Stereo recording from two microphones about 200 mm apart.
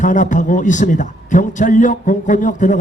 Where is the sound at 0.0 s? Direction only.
40° left (ahead or behind).